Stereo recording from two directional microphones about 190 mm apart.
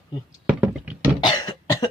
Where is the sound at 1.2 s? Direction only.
20° left (ahead or behind).